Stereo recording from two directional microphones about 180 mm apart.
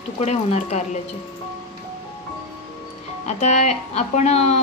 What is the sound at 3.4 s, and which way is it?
A woman's voice, 40° left (ahead or behind).